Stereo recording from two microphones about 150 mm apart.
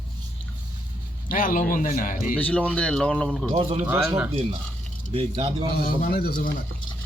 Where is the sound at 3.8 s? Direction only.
15° right (ahead or behind).